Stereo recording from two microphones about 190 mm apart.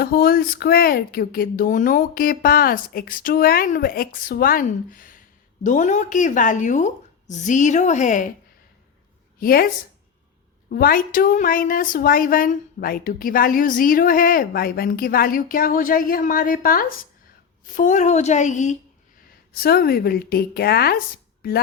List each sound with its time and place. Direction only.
0.0 s speech: 55° left (ahead or behind)
9.4 s speech: 50° left (ahead or behind)
19.5 s speech: 55° left (ahead or behind)